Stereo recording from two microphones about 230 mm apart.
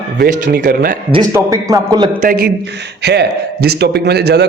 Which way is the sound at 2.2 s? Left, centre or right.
Right.